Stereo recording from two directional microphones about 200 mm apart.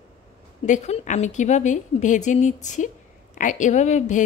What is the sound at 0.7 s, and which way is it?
A woman's voice, 35° left (ahead or behind).